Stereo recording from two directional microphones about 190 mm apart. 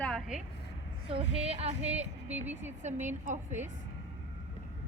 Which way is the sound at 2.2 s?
10° right (ahead or behind).